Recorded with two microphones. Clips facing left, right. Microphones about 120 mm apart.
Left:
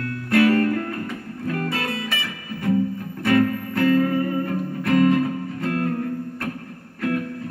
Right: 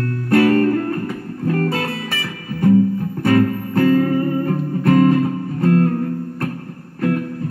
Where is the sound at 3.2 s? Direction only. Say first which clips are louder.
Right 3 dB; 35° right (ahead or behind).